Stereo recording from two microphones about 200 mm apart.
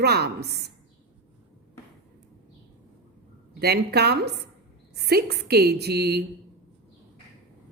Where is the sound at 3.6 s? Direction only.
55° right (ahead or behind).